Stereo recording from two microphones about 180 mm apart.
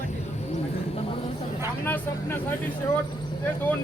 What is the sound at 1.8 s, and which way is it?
Vehicle, 10° left (ahead or behind).